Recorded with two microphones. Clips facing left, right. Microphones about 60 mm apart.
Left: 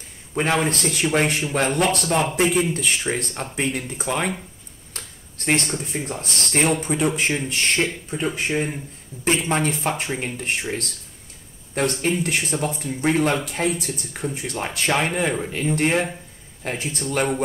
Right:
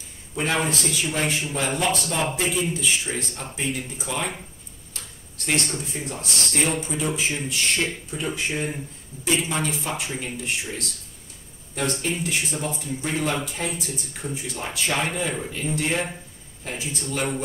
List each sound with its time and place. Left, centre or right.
0.3 s speech: left
4.9 s speech: left